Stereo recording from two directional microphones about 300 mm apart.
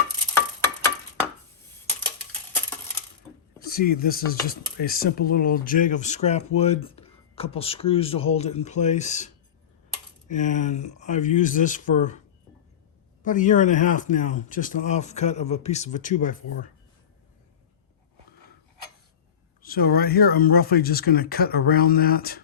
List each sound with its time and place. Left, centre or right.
0.3 s a sound: centre
3.6 s speech: left
13.2 s speech: left
19.6 s speech: left